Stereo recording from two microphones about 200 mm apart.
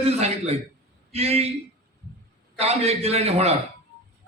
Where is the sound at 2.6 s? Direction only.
30° right (ahead or behind).